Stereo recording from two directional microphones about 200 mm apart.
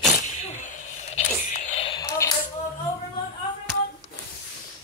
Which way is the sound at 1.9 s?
15° left (ahead or behind).